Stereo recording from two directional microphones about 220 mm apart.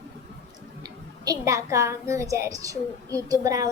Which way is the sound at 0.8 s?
15° right (ahead or behind).